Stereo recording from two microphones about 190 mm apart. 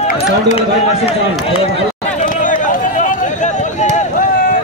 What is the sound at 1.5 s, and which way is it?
Speech, 30° left (ahead or behind).